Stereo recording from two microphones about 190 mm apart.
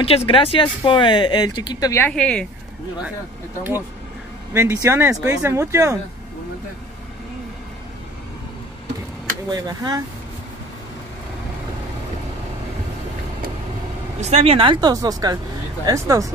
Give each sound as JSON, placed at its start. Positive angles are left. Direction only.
{"t": 0.0, "sound": "speech", "side_deg": 30}
{"t": 4.6, "sound": "speech", "side_deg": -15}
{"t": 9.5, "sound": "speech", "side_deg": -20}
{"t": 14.2, "sound": "speech", "side_deg": -35}